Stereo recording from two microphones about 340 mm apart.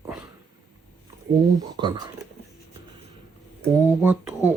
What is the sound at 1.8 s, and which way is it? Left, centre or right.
Speech, centre.